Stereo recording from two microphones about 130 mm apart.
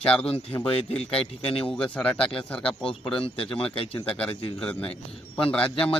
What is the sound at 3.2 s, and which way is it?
Speech, 45° left (ahead or behind).